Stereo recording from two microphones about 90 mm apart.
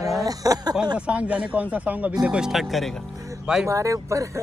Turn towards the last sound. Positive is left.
turn(degrees=-35)  # may be behind; listen again after turning